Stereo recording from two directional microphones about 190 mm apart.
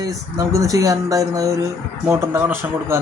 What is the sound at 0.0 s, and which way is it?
Speech, 20° right (ahead or behind).